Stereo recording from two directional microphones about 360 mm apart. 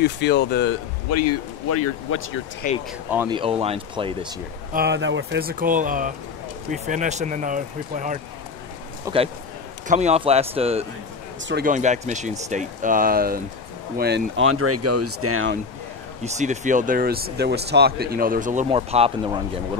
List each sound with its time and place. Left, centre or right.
0.0 s speech: left
1.1 s speech: left
2.6 s speech: left
3.1 s speech: centre
4.7 s speech: right
9.1 s speech: centre; by 15.6 s right
16.3 s speech: centre